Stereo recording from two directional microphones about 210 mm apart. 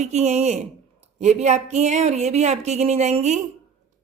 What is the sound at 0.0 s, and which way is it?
A woman's voice, 35° right (ahead or behind).